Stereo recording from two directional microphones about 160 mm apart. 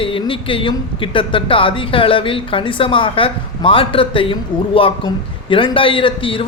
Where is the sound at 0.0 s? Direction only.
35° left (ahead or behind).